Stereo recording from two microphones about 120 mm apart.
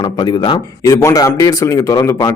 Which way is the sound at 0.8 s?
25° left (ahead or behind).